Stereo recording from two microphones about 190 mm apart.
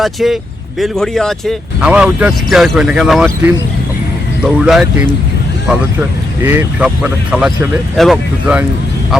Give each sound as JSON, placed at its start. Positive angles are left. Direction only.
{"t": 0.0, "sound": "speech", "side_deg": 0}
{"t": 4.4, "sound": "speech", "side_deg": -5}